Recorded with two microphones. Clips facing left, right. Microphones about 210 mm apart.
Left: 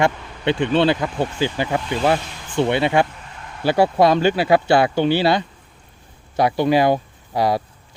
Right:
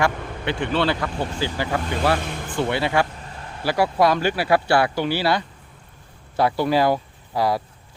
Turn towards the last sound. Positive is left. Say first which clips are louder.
# left 2 dB
turn(degrees=20)  # may be behind; listen again after turning